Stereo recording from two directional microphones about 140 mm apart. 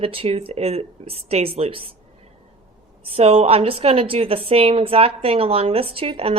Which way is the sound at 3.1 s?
45° right (ahead or behind).